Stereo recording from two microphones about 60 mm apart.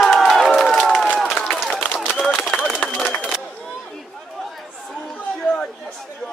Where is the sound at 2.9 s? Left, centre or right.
Centre.